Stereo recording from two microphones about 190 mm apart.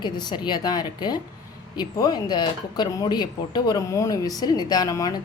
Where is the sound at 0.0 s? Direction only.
25° left (ahead or behind).